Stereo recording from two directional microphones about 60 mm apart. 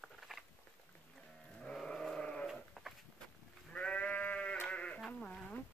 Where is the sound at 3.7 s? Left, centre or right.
Left.